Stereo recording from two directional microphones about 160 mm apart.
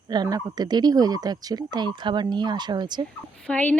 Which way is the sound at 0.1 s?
25° right (ahead or behind).